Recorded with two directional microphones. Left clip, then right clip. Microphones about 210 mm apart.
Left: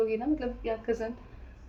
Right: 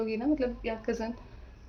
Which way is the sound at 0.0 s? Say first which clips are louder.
Left 1 dB; 45° right (ahead or behind).